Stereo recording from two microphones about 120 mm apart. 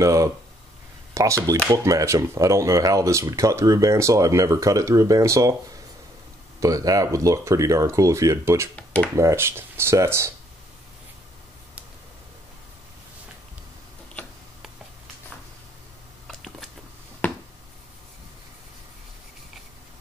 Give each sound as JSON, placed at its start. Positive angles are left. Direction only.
{"t": 0.0, "sound": "speech", "side_deg": -30}
{"t": 6.6, "sound": "speech", "side_deg": -30}
{"t": 16.3, "sound": "a sound", "side_deg": 5}